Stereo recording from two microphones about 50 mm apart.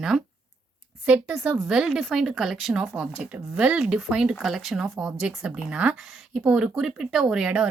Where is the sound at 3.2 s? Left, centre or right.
Right.